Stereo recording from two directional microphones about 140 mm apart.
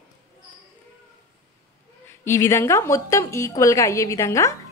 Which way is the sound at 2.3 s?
20° left (ahead or behind).